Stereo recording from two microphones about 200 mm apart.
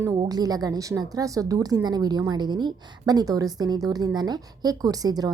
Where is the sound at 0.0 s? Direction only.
15° right (ahead or behind).